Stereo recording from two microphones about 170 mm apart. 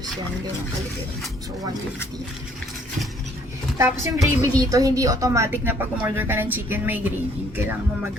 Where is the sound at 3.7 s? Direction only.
15° right (ahead or behind).